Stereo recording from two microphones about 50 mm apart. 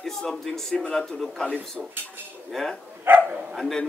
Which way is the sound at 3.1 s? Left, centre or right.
Right.